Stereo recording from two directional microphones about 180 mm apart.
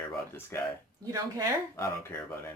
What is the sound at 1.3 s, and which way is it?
Speech, 15° right (ahead or behind).